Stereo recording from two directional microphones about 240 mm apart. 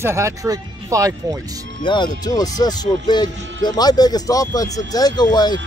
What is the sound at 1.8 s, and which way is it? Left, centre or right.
A man's voice, centre.